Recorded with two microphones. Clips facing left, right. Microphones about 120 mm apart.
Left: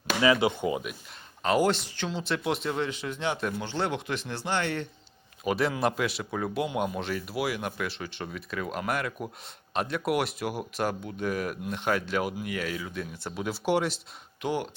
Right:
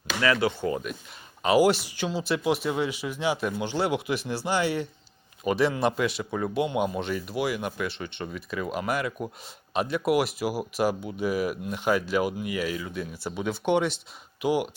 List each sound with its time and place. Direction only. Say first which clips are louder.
0.2 s speech: left 1 dB; 20° left (ahead or behind)
1.4 s speech: right 4 dB; 5° right (ahead or behind)
14.4 s speech: right 5 dB; 10° right (ahead or behind)